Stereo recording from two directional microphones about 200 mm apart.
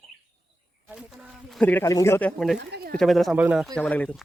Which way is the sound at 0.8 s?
5° right (ahead or behind).